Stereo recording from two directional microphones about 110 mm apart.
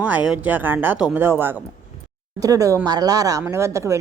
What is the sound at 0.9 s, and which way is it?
Speech, 5° right (ahead or behind).